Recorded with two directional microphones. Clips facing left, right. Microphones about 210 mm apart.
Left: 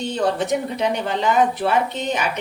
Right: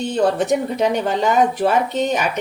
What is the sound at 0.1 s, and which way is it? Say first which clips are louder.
A woman's voice: right 4 dB; 45° right (ahead or behind).